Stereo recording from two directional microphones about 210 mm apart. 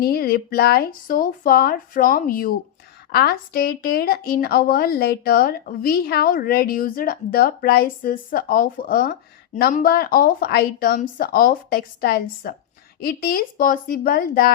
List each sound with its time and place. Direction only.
0.0 s a woman's voice: 45° left (ahead or behind)